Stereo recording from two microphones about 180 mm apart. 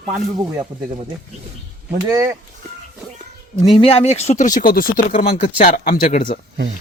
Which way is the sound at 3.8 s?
35° left (ahead or behind).